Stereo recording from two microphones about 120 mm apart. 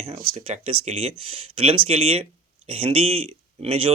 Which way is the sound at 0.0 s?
50° right (ahead or behind).